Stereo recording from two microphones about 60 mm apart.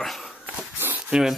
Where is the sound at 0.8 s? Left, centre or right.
Right.